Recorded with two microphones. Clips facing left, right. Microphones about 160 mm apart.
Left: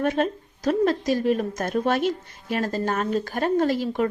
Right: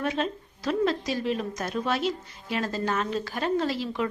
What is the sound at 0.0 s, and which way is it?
A woman's voice, 45° left (ahead or behind).